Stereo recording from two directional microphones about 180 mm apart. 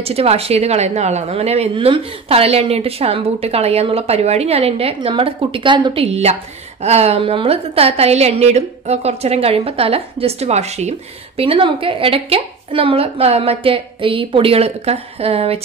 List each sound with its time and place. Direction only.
0.0 s a woman's voice: 35° right (ahead or behind)